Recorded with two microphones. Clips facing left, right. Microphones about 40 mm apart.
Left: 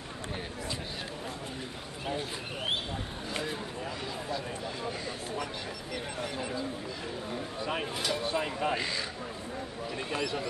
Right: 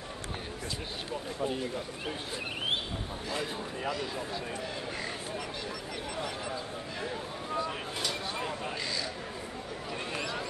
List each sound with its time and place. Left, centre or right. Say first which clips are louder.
8.4 s speech: left 5 dB; left